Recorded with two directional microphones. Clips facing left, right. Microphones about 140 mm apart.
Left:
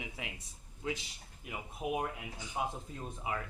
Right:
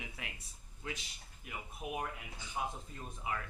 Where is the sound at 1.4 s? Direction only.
20° left (ahead or behind).